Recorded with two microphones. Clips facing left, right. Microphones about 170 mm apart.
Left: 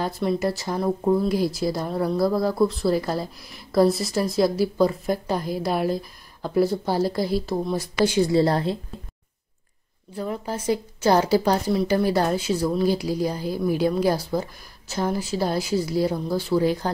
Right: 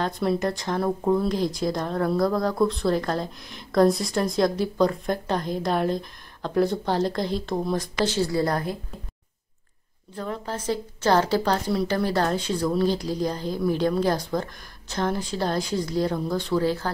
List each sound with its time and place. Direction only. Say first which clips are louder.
0.0 s speech: left 1 dB; centre (ahead or behind)
8.3 s a woman's voice: left 4 dB; 25° left (ahead or behind)
10.1 s speech: left 2 dB; 10° left (ahead or behind)